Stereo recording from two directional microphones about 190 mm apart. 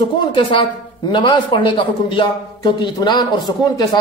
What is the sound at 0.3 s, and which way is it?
A man's voice, 25° left (ahead or behind).